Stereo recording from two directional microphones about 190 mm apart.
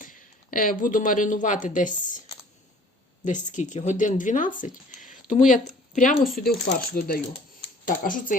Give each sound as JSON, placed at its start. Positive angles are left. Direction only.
{"t": 0.0, "sound": "speech", "side_deg": 45}
{"t": 3.2, "sound": "speech", "side_deg": 40}